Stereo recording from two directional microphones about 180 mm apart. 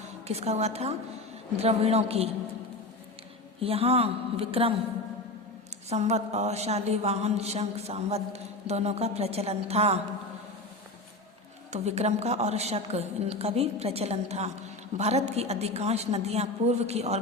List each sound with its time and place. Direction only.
0.3 s a woman's voice: 35° right (ahead or behind)
3.6 s a woman's voice: 35° right (ahead or behind)
5.9 s a woman's voice: 35° right (ahead or behind)
11.7 s a woman's voice: 40° right (ahead or behind)